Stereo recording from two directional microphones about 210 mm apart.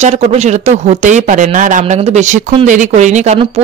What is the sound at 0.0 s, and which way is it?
Speech, 30° right (ahead or behind).